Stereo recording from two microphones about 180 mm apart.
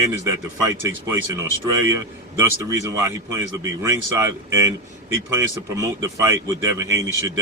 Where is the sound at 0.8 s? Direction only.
15° right (ahead or behind).